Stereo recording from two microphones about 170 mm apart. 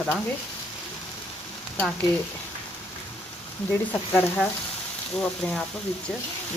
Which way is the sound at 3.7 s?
10° left (ahead or behind).